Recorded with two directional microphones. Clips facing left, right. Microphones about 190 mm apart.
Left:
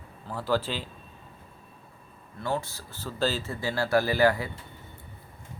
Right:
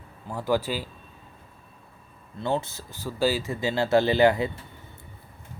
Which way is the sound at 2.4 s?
20° right (ahead or behind).